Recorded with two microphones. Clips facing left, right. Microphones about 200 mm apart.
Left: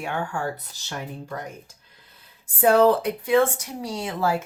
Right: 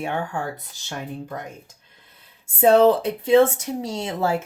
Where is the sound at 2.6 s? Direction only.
25° right (ahead or behind).